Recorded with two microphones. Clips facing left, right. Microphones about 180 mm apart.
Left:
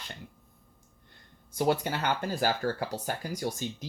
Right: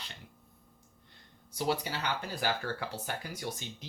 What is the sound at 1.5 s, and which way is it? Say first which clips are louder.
Speech: left 5 dB; 50° left (ahead or behind).